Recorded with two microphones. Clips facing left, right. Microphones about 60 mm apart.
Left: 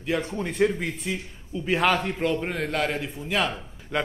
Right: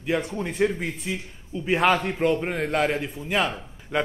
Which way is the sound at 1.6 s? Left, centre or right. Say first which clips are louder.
Right 2 dB; centre.